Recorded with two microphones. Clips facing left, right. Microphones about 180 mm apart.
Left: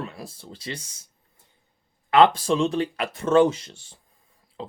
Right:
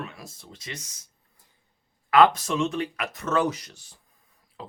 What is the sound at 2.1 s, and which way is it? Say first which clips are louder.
Speech: left 2 dB; 30° left (ahead or behind).